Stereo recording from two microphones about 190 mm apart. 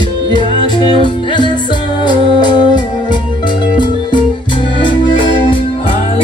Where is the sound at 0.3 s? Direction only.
25° left (ahead or behind).